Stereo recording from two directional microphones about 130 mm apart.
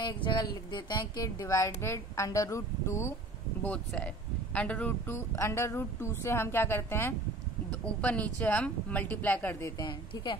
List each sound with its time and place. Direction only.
0.0 s speech: 35° left (ahead or behind)
3.6 s speech: 10° left (ahead or behind)
9.8 s a woman's voice: 35° left (ahead or behind)